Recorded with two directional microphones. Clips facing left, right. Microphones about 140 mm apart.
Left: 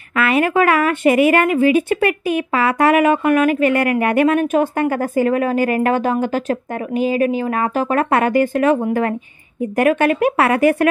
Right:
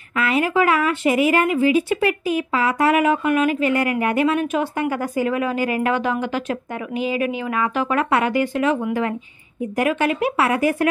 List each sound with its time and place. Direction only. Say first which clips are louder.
0.1 s a woman's voice: left 4 dB; 70° left (ahead or behind)